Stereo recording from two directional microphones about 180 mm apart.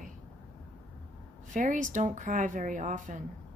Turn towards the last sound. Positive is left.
turn(degrees=-45)  # may be behind; listen again after turning